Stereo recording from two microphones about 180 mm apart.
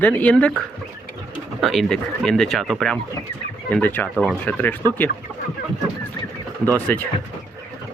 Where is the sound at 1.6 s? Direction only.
Centre (ahead or behind).